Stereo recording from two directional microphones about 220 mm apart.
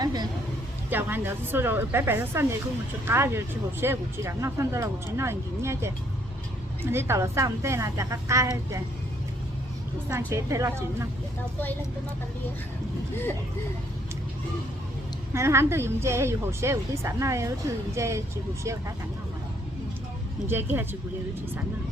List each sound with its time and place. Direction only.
0.0 s vehicle: 15° right (ahead or behind)
0.9 s a woman's voice: 10° right (ahead or behind)
6.9 s a woman's voice: 10° right (ahead or behind)
10.1 s a woman's voice: 15° right (ahead or behind)
15.3 s a woman's voice: 10° right (ahead or behind)
20.5 s a woman's voice: 10° right (ahead or behind)